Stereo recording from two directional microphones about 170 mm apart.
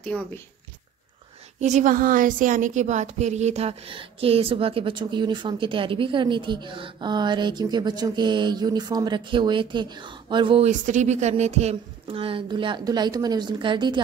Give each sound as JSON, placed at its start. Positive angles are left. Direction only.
{"t": 0.0, "sound": "speech", "side_deg": 10}
{"t": 1.6, "sound": "speech", "side_deg": -45}
{"t": 10.7, "sound": "speech", "side_deg": -45}